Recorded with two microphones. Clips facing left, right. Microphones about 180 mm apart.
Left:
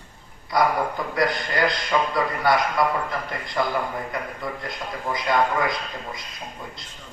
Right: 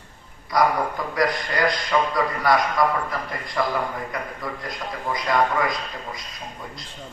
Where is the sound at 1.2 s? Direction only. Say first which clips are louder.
Even; 25° left (ahead or behind).